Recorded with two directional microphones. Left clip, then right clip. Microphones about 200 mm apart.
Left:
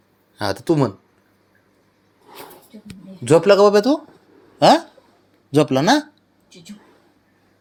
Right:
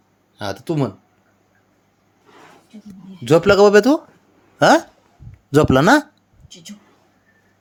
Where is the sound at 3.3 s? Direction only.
20° right (ahead or behind).